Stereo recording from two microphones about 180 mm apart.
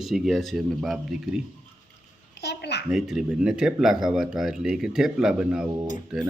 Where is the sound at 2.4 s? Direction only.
65° left (ahead or behind).